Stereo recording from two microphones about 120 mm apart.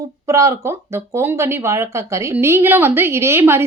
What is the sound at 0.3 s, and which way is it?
Speech, 25° right (ahead or behind).